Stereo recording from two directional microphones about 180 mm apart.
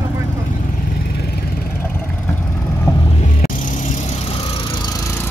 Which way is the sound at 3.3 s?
50° left (ahead or behind).